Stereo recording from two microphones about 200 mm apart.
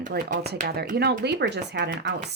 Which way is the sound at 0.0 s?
40° right (ahead or behind).